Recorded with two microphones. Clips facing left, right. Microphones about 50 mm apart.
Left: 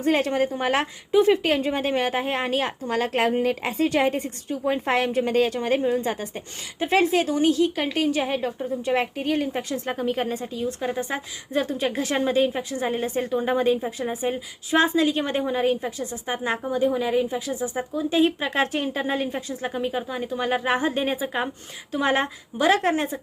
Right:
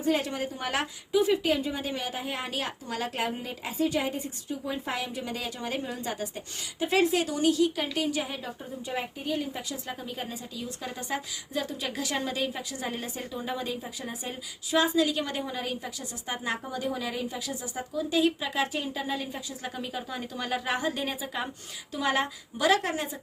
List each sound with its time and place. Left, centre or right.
0.0 s a woman's voice: left
8.8 s a woman's voice: left
10.8 s a woman's voice: left
18.3 s a woman's voice: left
19.7 s a woman's voice: left